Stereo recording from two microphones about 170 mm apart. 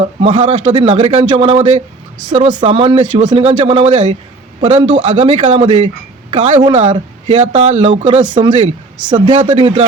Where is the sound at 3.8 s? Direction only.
45° right (ahead or behind).